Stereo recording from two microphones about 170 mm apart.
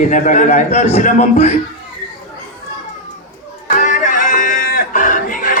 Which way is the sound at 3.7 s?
50° left (ahead or behind).